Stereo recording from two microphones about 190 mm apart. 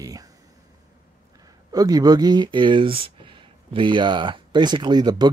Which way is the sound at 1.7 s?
20° right (ahead or behind).